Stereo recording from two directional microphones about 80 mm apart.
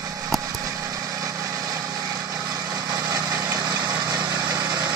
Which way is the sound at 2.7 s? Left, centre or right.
Right.